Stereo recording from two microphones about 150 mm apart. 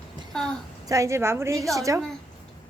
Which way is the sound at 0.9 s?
20° right (ahead or behind).